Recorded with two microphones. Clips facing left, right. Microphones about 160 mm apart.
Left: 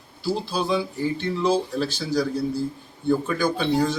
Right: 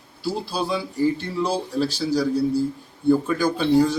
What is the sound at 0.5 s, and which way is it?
A man's voice, 5° right (ahead or behind).